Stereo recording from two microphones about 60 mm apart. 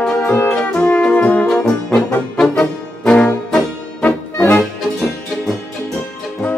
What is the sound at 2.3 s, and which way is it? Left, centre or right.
Brass instrument, centre.